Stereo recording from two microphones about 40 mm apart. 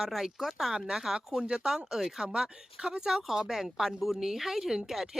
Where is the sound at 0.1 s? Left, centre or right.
Centre.